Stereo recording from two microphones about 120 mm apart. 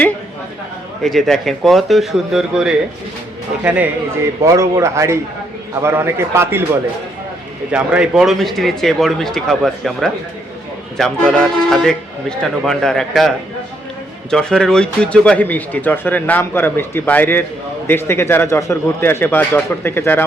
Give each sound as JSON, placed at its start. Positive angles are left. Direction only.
{"t": 1.0, "sound": "a man's voice", "side_deg": 5}
{"t": 4.1, "sound": "a man's voice", "side_deg": -25}
{"t": 7.7, "sound": "a man's voice", "side_deg": -10}